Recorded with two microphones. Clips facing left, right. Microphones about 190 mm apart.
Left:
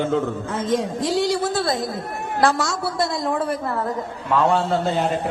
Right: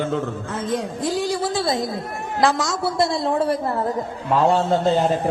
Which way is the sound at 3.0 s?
30° right (ahead or behind).